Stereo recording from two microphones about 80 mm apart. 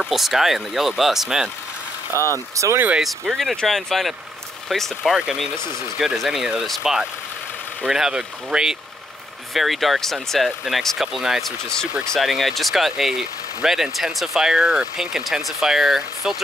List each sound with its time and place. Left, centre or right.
0.0 s speech: centre
2.1 s speech: left
2.5 s speech: right
3.0 s speech: centre